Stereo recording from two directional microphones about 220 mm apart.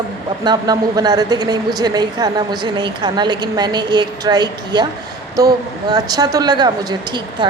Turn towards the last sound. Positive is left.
turn(degrees=-20)  # may be behind; listen again after turning